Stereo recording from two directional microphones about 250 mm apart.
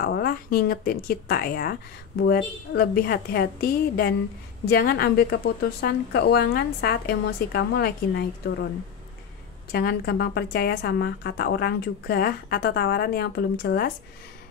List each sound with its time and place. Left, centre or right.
0.0 s a woman's voice: left
9.7 s a woman's voice: left